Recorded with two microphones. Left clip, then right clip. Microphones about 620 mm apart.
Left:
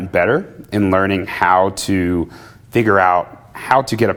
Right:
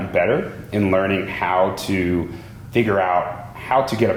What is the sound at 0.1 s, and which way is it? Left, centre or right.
Speech, left.